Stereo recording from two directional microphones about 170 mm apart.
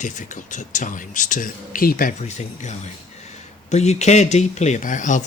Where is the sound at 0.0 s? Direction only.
45° left (ahead or behind).